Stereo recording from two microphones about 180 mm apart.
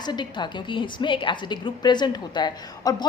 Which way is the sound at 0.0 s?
25° left (ahead or behind).